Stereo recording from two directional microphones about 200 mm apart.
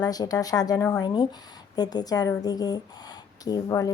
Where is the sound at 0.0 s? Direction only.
20° left (ahead or behind).